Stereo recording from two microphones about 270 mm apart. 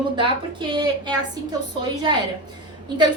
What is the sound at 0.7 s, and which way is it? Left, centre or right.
A woman's voice, centre.